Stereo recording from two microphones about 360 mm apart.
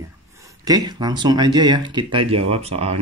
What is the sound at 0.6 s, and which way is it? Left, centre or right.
Speech, centre.